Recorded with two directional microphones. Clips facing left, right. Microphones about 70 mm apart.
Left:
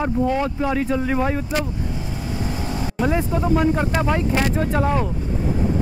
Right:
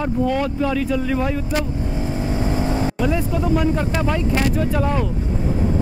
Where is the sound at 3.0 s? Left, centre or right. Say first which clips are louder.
Even; left.